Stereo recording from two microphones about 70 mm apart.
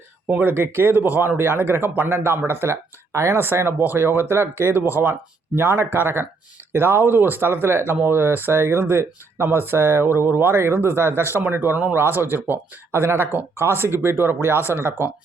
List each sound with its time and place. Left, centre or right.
0.3 s speech: right